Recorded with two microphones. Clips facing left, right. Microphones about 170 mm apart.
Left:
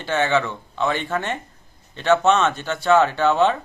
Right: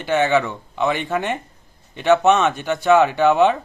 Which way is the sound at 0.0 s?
15° right (ahead or behind).